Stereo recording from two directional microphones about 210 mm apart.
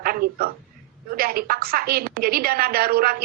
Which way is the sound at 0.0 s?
45° right (ahead or behind).